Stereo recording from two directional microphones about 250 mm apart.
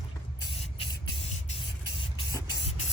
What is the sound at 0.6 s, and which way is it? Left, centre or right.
Spray, left.